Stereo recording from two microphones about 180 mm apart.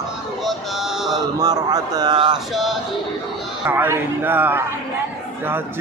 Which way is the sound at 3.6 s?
10° right (ahead or behind).